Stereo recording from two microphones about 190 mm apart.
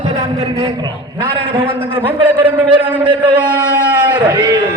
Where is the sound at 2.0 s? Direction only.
10° right (ahead or behind).